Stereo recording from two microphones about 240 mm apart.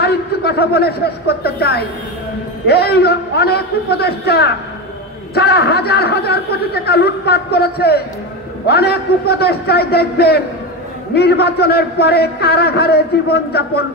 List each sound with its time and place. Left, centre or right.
0.0 s a man's voice: left